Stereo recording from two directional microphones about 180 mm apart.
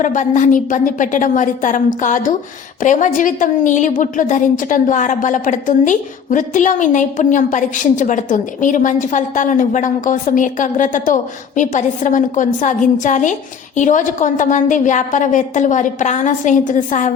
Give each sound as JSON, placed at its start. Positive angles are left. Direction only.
{"t": 0.0, "sound": "a woman's voice", "side_deg": 45}